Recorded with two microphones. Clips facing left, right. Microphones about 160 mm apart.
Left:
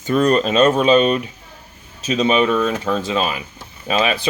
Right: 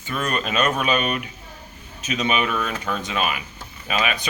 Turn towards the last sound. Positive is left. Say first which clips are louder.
# left 6 dB
turn(degrees=30)  # may be behind; listen again after turning